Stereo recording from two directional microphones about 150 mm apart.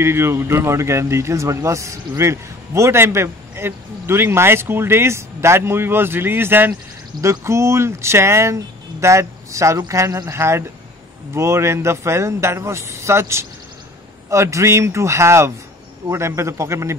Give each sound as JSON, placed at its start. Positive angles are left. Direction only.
{"t": 0.0, "sound": "a man's voice", "side_deg": -15}